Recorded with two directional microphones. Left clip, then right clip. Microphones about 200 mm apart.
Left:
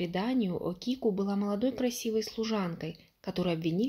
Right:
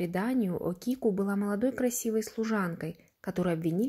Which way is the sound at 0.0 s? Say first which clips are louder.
Right 1 dB; 20° right (ahead or behind).